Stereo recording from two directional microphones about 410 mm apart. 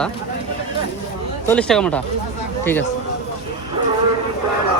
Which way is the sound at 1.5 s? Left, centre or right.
Centre.